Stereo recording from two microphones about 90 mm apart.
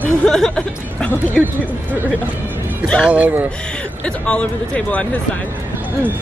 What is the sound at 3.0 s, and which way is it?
Speech, 15° right (ahead or behind).